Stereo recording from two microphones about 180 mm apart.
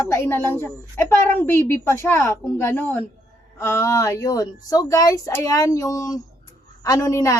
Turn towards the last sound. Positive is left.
turn(degrees=15)  # may be behind; listen again after turning